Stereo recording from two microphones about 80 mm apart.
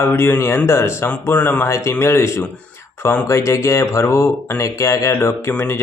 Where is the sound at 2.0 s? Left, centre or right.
Left.